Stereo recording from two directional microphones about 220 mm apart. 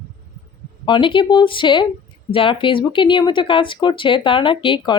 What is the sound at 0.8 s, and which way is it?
Speech, 20° left (ahead or behind).